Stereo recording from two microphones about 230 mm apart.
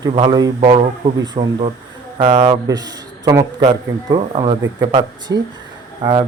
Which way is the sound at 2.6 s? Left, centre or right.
Centre.